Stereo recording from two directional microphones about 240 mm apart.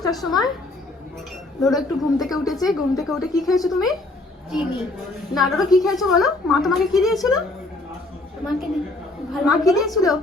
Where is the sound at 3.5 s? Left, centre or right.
Centre.